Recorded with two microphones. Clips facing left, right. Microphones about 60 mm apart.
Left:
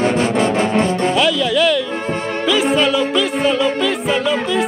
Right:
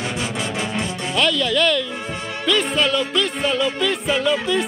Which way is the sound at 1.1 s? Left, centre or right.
Centre.